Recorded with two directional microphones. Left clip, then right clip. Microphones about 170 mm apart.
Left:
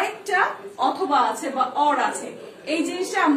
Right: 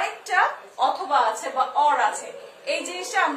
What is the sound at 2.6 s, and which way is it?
Speech, 30° right (ahead or behind).